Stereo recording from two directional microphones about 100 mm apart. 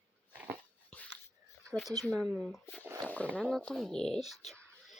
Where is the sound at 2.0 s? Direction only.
Centre (ahead or behind).